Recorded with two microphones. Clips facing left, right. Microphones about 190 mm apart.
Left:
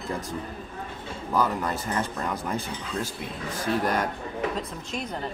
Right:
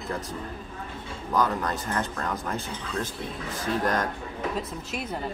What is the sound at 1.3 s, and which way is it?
Speech, 10° left (ahead or behind).